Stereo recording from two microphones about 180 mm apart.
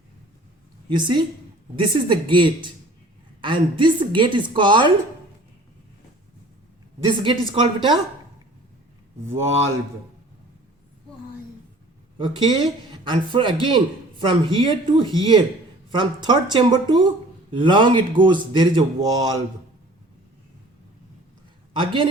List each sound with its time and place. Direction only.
0.9 s speech: 25° right (ahead or behind)
7.0 s speech: 25° right (ahead or behind)
12.1 s speech: 25° right (ahead or behind)
21.8 s speech: 30° right (ahead or behind)